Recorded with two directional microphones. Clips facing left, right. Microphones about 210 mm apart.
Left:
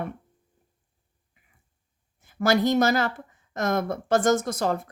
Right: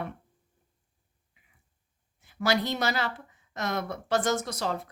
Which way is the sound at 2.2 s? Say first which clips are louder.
Left 5 dB; 45° left (ahead or behind).